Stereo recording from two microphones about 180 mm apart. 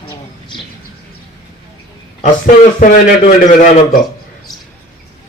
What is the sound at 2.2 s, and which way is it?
A man's voice, 45° left (ahead or behind).